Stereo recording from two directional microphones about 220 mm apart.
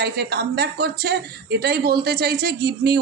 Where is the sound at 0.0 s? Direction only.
45° right (ahead or behind).